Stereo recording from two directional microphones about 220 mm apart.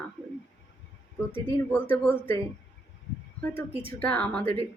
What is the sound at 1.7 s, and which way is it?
Speech, 10° left (ahead or behind).